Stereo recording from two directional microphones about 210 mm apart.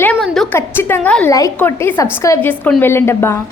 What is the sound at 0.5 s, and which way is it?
A woman's voice, 10° left (ahead or behind).